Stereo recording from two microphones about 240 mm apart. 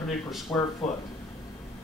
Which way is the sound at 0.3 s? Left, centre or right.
Centre.